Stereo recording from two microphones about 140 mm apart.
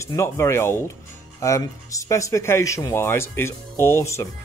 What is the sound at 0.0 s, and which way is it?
Speech, 20° left (ahead or behind).